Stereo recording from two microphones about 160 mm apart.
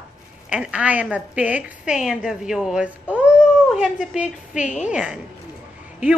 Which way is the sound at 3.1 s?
5° right (ahead or behind).